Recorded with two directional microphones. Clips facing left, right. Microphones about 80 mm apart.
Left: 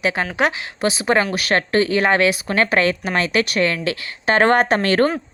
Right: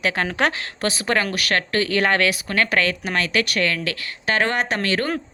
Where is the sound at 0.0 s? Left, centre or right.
Centre; by 5.1 s left.